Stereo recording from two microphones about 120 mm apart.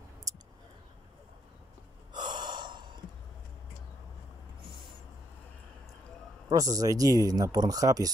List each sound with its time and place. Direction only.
2.1 s gasp: 40° right (ahead or behind)
4.6 s a sound: 45° right (ahead or behind)
6.5 s speech: 30° right (ahead or behind)